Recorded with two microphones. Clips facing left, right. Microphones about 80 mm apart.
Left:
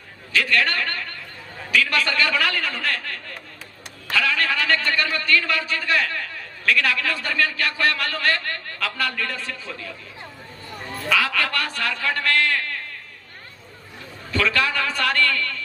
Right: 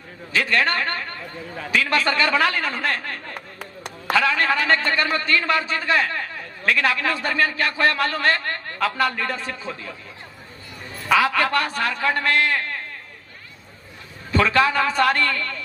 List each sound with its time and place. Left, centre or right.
0.3 s a woman's voice: right
3.3 s a sound: right
4.1 s a man's voice: right
11.1 s a man's voice: right
14.3 s a man's voice: right